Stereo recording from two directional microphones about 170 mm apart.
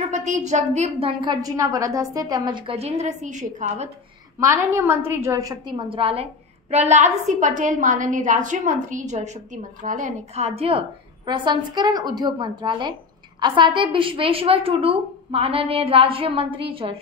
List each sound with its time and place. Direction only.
0.1 s a woman's voice: 45° right (ahead or behind)
1.2 s a woman's voice: 20° right (ahead or behind); by 3.9 s 40° right (ahead or behind)
4.4 s a woman's voice: 15° right (ahead or behind); by 16.9 s 30° right (ahead or behind)